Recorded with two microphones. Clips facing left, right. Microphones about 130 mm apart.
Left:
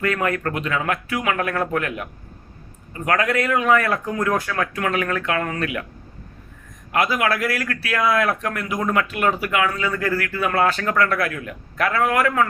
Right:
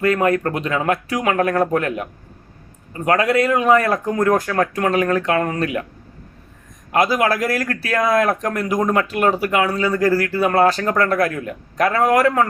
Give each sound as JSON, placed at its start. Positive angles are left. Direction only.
{"t": 0.0, "sound": "a man's voice", "side_deg": -30}
{"t": 6.9, "sound": "a man's voice", "side_deg": -35}